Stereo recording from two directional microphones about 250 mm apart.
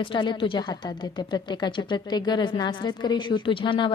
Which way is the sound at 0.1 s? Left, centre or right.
Centre.